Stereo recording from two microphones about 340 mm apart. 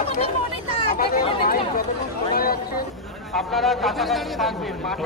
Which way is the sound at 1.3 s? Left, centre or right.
Left.